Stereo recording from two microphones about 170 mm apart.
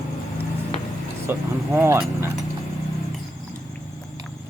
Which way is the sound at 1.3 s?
15° right (ahead or behind).